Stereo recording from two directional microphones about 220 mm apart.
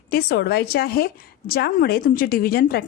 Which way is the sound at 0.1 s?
45° left (ahead or behind).